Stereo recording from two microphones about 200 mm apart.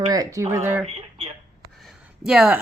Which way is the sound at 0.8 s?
30° right (ahead or behind).